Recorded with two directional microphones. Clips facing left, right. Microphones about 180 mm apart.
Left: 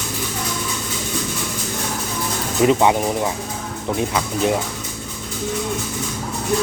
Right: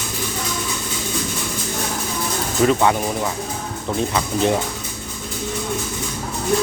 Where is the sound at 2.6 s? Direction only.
15° left (ahead or behind).